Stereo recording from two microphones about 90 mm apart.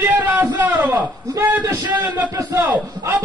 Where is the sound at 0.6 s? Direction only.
20° right (ahead or behind).